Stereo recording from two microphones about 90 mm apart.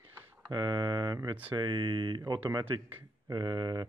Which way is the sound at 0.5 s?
65° right (ahead or behind).